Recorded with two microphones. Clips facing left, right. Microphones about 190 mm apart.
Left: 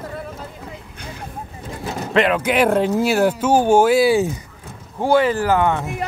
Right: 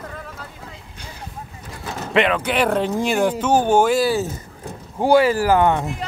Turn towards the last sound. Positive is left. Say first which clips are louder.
# right 1 dB
turn(degrees=-15)  # may be behind; listen again after turning